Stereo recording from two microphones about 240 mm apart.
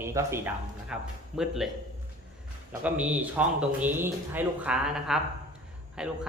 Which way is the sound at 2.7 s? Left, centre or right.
Centre.